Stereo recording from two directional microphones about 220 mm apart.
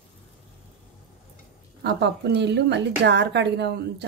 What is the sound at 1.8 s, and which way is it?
Speech, 50° right (ahead or behind).